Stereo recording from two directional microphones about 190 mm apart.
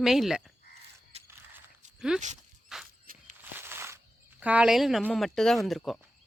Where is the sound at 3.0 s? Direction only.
45° right (ahead or behind).